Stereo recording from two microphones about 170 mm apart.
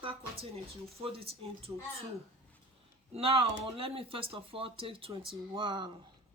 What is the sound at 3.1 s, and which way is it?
Speech, 35° right (ahead or behind).